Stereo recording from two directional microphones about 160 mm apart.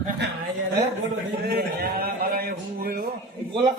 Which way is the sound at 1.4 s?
75° right (ahead or behind).